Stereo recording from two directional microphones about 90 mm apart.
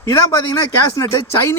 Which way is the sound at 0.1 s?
45° left (ahead or behind).